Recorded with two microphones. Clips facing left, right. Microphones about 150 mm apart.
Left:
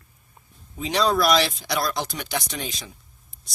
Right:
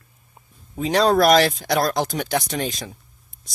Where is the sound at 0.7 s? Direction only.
45° right (ahead or behind).